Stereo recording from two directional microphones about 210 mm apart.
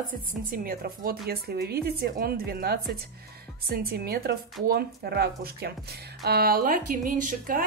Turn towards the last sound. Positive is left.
turn(degrees=-40)  # may be behind; listen again after turning